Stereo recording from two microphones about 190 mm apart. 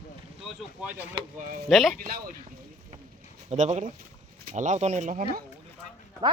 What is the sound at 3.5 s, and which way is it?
Speech, 35° right (ahead or behind).